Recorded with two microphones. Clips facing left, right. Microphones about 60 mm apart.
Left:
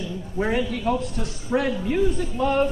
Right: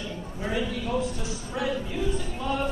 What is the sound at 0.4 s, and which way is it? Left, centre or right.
A man's voice, left.